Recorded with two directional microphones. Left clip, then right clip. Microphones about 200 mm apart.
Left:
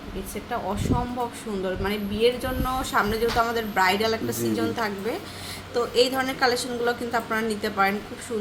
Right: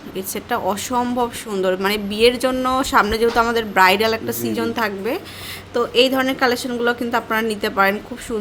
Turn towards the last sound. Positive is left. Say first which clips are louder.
# right 6 dB
turn(degrees=-50)  # may be behind; listen again after turning